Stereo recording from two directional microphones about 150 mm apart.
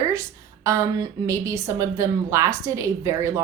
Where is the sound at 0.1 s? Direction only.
20° right (ahead or behind).